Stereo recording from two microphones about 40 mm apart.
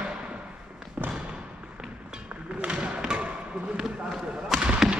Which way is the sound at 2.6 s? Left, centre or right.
Right.